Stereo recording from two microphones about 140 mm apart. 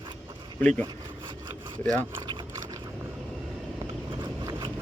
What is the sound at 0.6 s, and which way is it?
Speech, 10° left (ahead or behind).